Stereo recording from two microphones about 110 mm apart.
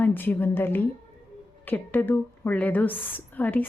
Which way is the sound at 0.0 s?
15° left (ahead or behind).